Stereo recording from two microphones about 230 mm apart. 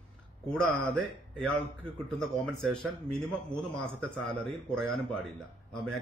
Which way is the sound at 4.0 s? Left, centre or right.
Centre.